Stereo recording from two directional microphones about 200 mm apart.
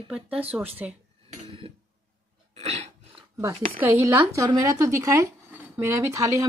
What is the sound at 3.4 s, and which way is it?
Speech, 15° right (ahead or behind).